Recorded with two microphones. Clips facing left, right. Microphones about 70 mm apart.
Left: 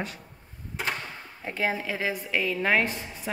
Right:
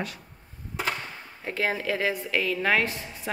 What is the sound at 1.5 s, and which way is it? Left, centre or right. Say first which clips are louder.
A woman's voice: right 1 dB; centre.